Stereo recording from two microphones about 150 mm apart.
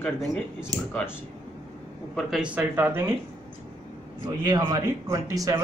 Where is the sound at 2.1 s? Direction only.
5° right (ahead or behind).